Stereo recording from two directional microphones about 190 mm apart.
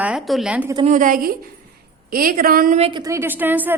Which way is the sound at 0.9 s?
45° right (ahead or behind).